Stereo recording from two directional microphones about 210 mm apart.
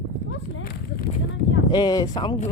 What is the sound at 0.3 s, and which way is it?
Horse, 55° left (ahead or behind).